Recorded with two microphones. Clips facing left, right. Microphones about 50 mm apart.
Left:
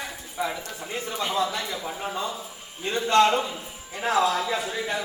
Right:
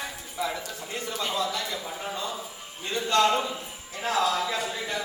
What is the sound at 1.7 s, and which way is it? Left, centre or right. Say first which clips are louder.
Speech: left 2 dB; centre.